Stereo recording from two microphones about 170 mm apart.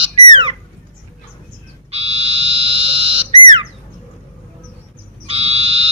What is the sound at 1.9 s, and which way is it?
Frog, 35° right (ahead or behind).